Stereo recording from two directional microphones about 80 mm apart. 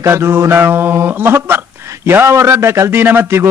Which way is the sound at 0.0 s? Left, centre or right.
Right.